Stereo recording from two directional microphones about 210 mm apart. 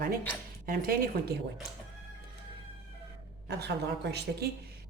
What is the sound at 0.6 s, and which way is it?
Speech, 45° right (ahead or behind).